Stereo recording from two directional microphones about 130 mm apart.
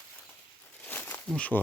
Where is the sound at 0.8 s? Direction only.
15° left (ahead or behind).